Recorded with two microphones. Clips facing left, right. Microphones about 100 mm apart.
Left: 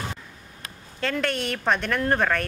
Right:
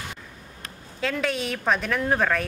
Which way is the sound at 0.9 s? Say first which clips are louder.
Even; centre (ahead or behind).